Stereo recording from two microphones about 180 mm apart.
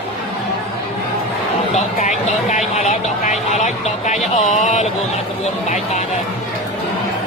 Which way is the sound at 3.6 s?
40° left (ahead or behind).